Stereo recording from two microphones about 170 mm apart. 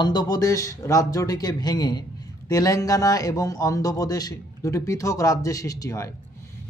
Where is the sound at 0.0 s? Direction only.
25° left (ahead or behind).